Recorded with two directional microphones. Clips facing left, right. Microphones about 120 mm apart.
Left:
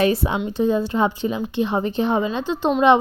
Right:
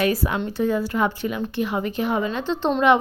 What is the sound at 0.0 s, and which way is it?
A woman's voice, 25° left (ahead or behind).